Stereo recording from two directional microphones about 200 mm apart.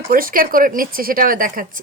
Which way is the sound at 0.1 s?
45° right (ahead or behind).